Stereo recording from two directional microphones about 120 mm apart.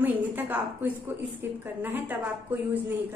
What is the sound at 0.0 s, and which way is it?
A woman's voice, 15° right (ahead or behind).